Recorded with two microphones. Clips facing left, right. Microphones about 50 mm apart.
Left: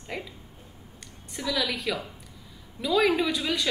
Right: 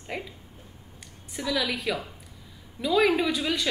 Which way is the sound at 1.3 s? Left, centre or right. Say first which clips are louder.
Right 1 dB; centre.